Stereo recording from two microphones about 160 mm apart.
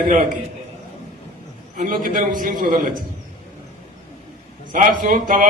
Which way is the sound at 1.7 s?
60° right (ahead or behind).